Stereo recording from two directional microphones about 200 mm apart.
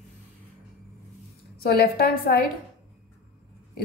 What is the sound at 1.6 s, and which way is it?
Speech, 50° left (ahead or behind).